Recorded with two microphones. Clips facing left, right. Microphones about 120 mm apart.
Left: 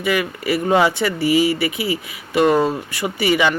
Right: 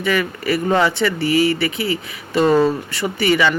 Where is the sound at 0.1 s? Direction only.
10° left (ahead or behind).